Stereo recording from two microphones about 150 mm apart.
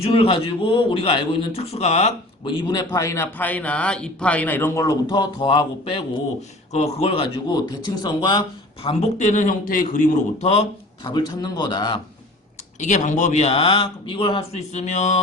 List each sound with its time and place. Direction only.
0.0 s a man's voice: 40° left (ahead or behind)
7.5 s a man's voice: 25° left (ahead or behind)
8.8 s a man's voice: 40° left (ahead or behind)
9.1 s speech: 55° left (ahead or behind)
11.1 s a man's voice: 25° left (ahead or behind)
12.8 s a man's voice: 55° left (ahead or behind); by 14.6 s 35° left (ahead or behind)
14.7 s a man's voice: 50° left (ahead or behind)